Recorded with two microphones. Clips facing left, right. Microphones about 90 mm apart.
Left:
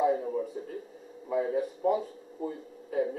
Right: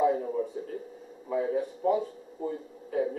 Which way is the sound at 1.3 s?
Centre (ahead or behind).